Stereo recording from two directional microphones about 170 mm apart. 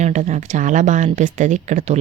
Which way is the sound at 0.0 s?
45° right (ahead or behind).